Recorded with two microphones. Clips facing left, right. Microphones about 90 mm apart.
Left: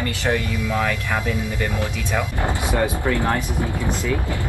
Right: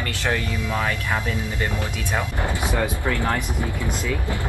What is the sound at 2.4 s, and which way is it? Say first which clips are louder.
Speech: left 4 dB; 20° left (ahead or behind).